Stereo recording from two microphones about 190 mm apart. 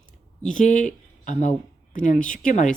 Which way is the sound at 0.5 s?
40° left (ahead or behind).